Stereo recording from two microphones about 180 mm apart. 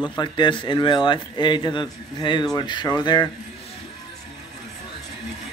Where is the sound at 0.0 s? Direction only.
25° left (ahead or behind).